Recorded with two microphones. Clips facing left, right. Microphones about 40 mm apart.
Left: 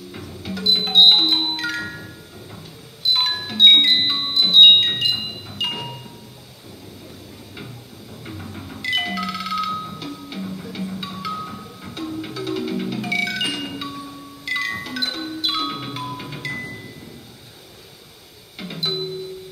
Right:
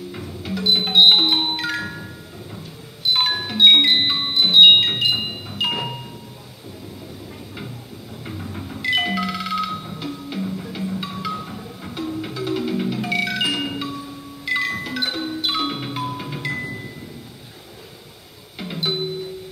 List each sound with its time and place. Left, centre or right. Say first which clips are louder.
0.4 s music: right 1 dB; centre
5.1 s wind chime: right 3 dB; centre
8.3 s music: right 2 dB; centre
18.6 s music: right 2 dB; centre